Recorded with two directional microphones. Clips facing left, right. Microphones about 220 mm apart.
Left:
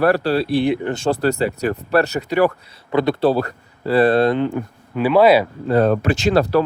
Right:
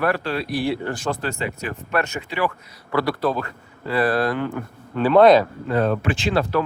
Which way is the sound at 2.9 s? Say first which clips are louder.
Left 5 dB; 20° left (ahead or behind).